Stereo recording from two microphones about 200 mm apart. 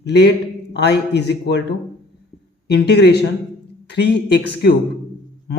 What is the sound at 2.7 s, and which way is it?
Speech, 55° left (ahead or behind).